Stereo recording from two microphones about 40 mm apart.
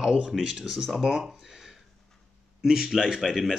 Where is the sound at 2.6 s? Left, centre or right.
Centre.